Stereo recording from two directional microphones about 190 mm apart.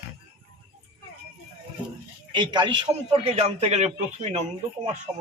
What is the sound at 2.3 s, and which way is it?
A man's voice, 25° right (ahead or behind).